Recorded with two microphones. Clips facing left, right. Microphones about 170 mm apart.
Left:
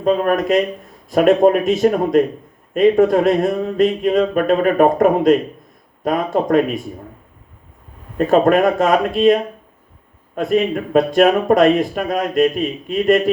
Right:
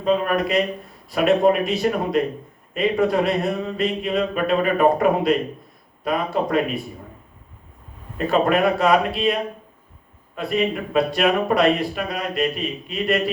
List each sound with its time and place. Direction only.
0.0 s speech: 45° left (ahead or behind)
8.3 s speech: 45° left (ahead or behind)